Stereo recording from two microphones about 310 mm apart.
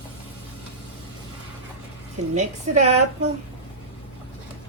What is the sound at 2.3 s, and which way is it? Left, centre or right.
Speech, right.